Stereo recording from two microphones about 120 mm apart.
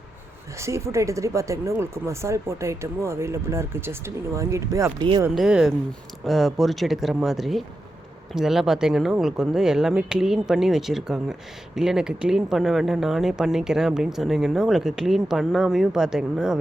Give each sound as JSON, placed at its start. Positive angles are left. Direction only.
{"t": 0.6, "sound": "speech", "side_deg": -25}
{"t": 4.9, "sound": "speech", "side_deg": -40}
{"t": 5.3, "sound": "speech", "side_deg": -5}